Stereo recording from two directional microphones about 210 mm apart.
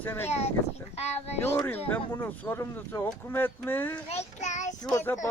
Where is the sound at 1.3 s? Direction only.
10° left (ahead or behind).